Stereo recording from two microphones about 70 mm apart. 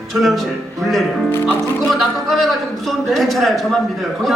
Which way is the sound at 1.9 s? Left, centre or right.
Centre.